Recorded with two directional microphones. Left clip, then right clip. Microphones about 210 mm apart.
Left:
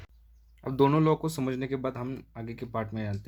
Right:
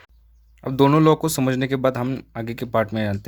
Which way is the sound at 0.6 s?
25° right (ahead or behind).